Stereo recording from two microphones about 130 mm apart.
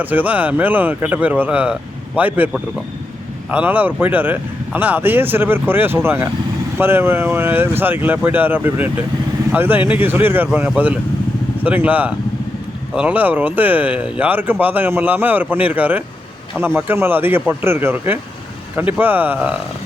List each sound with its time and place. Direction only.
0.0 s speech: 15° right (ahead or behind)
3.5 s speech: 15° right (ahead or behind)